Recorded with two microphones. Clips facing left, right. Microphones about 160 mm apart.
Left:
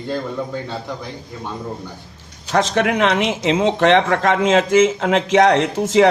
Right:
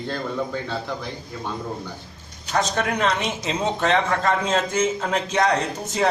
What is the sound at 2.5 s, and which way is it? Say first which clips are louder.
Speech: left 6 dB; 80° left.